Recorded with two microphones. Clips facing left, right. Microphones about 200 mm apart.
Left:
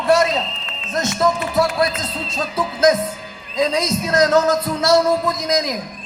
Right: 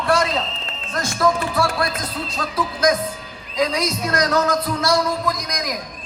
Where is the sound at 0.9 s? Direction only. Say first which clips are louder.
Left 1 dB; 20° left (ahead or behind).